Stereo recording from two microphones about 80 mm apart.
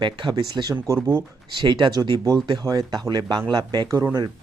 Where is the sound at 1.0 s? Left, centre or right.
Right.